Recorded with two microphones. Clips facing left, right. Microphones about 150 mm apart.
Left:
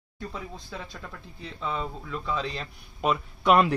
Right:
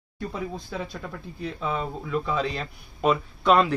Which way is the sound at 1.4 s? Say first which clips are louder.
Right 3 dB; 10° right (ahead or behind).